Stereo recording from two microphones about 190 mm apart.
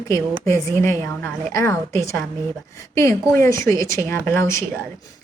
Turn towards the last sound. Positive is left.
turn(degrees=15)  # may be behind; listen again after turning